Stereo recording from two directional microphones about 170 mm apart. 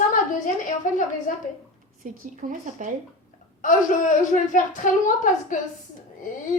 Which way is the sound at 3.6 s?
45° left (ahead or behind).